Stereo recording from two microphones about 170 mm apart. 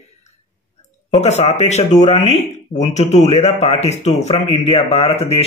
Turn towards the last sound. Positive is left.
turn(degrees=35)  # may be behind; listen again after turning